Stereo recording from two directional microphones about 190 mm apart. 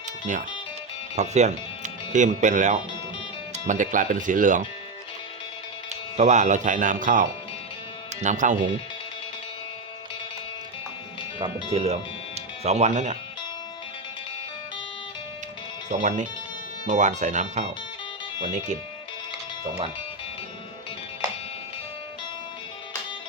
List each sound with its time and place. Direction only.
0.3 s speech: 40° right (ahead or behind)
6.1 s speech: 40° right (ahead or behind)
11.3 s speech: 30° right (ahead or behind)
15.9 s speech: 40° right (ahead or behind)